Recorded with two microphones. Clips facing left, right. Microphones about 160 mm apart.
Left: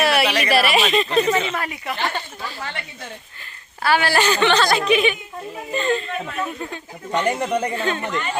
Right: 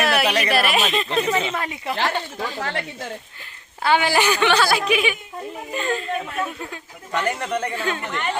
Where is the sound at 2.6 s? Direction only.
85° right.